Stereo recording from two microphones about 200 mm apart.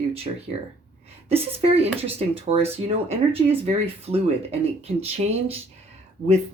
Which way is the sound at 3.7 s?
30° right (ahead or behind).